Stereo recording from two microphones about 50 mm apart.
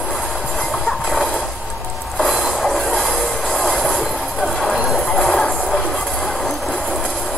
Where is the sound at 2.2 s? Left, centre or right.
Centre.